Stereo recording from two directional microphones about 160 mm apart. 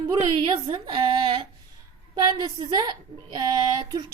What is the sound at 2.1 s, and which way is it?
A woman's voice, 25° right (ahead or behind).